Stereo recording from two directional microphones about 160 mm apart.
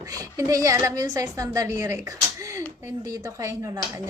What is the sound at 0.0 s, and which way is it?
A woman's voice, 20° right (ahead or behind).